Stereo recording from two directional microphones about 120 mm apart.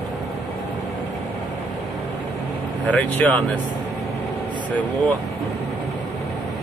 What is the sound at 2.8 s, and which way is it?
Speech, 10° left (ahead or behind).